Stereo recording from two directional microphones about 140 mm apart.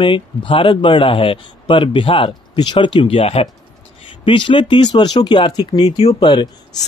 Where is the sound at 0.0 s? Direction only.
35° left (ahead or behind).